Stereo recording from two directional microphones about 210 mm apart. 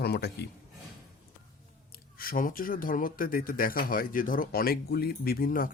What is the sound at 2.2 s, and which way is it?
Speech, 40° left (ahead or behind).